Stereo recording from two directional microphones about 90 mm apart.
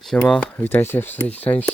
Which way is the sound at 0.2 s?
15° left (ahead or behind).